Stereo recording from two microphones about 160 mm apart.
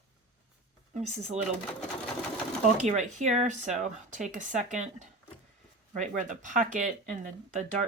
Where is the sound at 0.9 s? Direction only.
45° right (ahead or behind).